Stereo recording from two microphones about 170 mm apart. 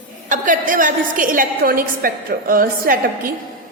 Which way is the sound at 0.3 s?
50° right (ahead or behind).